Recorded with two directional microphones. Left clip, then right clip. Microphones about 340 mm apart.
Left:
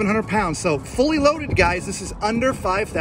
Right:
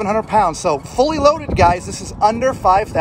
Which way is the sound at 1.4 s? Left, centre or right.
Right.